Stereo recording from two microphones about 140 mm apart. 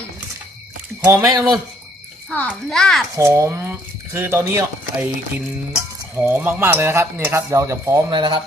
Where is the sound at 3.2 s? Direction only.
20° right (ahead or behind).